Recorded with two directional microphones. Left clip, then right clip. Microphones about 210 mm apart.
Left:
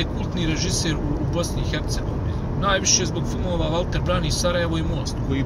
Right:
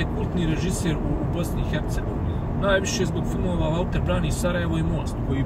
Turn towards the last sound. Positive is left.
turn(degrees=25)  # may be behind; listen again after turning